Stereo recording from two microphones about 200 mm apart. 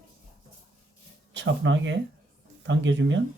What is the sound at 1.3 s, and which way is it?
Speech, 65° right (ahead or behind).